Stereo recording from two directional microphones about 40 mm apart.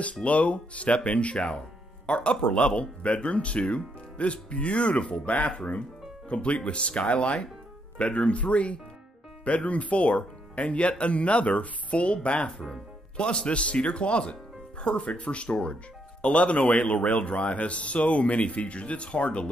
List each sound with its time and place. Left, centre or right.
0.0 s a man's voice: left